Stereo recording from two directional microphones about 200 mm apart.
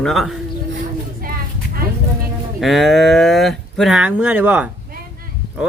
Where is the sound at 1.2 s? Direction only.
50° right (ahead or behind).